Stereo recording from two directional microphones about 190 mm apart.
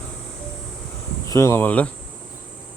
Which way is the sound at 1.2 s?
15° left (ahead or behind).